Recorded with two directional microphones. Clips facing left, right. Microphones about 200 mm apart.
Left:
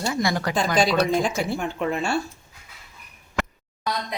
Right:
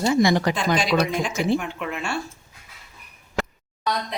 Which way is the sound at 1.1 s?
35° left (ahead or behind).